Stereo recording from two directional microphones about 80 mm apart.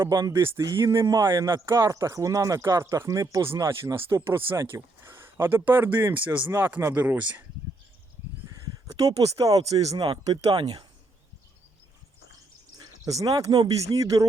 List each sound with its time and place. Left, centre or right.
0.1 s speech: right
4.3 s speech: right
8.4 s speech: right
10.6 s speech: right
12.7 s speech: right